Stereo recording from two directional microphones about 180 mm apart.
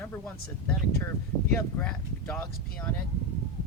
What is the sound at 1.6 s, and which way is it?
Speech, 10° left (ahead or behind).